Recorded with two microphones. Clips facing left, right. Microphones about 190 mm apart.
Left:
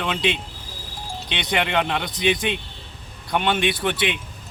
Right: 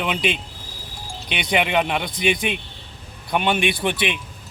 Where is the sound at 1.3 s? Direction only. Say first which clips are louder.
Right 2 dB; 10° right (ahead or behind).